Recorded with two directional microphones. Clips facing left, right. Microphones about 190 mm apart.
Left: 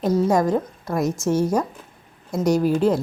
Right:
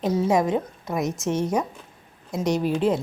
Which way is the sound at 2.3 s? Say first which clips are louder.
Left 4 dB; centre (ahead or behind).